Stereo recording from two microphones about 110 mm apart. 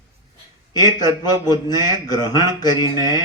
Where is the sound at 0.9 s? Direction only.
40° left (ahead or behind).